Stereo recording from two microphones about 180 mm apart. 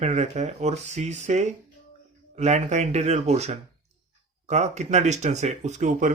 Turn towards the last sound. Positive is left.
turn(degrees=-45)  # may be behind; listen again after turning